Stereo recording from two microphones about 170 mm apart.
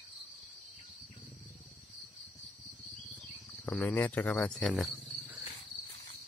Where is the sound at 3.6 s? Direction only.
10° left (ahead or behind).